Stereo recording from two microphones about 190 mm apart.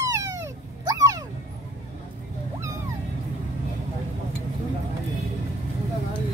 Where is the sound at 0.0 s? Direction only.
15° right (ahead or behind).